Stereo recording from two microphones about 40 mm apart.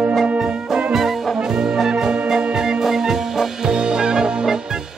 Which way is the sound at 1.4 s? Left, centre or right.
Centre.